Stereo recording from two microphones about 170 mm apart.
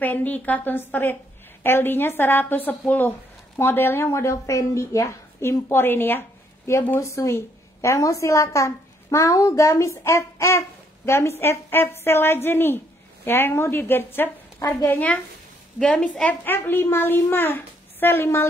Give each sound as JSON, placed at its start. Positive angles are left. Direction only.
{"t": 0.0, "sound": "a woman's voice", "side_deg": 10}
{"t": 15.8, "sound": "a woman's voice", "side_deg": 5}